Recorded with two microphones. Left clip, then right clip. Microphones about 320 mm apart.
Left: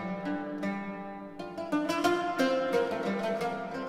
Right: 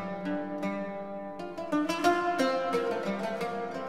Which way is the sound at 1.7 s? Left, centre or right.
Centre.